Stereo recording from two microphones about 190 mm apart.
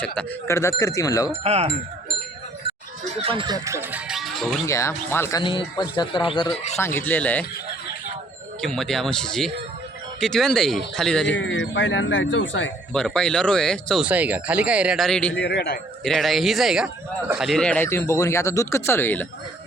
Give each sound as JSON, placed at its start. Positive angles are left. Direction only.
{"t": 0.0, "sound": "speech", "side_deg": 5}
{"t": 1.3, "sound": "wind chime", "side_deg": -35}
{"t": 3.1, "sound": "speech", "side_deg": -30}
{"t": 3.8, "sound": "music", "side_deg": -5}
{"t": 4.6, "sound": "speech", "side_deg": 15}
{"t": 5.4, "sound": "speech", "side_deg": 25}
{"t": 6.7, "sound": "speech", "side_deg": 15}
{"t": 8.6, "sound": "speech", "side_deg": 0}
{"t": 11.3, "sound": "speech", "side_deg": 75}
{"t": 12.9, "sound": "speech", "side_deg": 5}
{"t": 15.4, "sound": "a man's voice", "side_deg": 60}
{"t": 16.0, "sound": "speech", "side_deg": 0}